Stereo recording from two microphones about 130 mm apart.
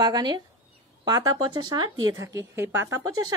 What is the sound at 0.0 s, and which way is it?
A woman's voice, 30° right (ahead or behind).